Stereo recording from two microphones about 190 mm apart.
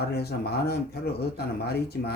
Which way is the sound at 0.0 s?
55° left (ahead or behind).